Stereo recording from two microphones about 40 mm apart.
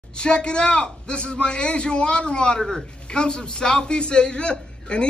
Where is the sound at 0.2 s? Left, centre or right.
Left.